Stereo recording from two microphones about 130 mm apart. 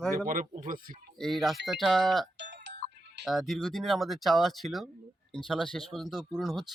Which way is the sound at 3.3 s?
Centre (ahead or behind).